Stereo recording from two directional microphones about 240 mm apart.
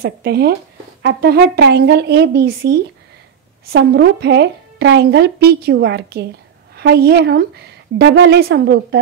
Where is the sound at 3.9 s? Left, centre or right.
Right.